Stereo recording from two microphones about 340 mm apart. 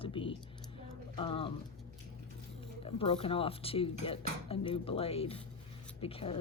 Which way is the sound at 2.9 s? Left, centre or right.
Centre.